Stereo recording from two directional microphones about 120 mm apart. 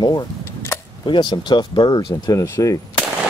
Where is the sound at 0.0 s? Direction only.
35° left (ahead or behind).